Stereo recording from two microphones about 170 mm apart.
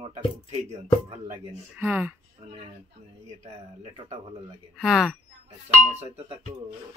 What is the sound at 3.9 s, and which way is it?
Speech, 30° right (ahead or behind).